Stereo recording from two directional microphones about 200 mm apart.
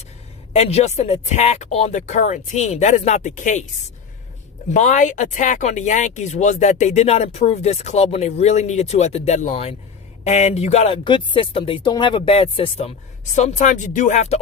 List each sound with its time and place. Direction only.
0.5 s speech: 30° left (ahead or behind)
4.7 s speech: 40° left (ahead or behind)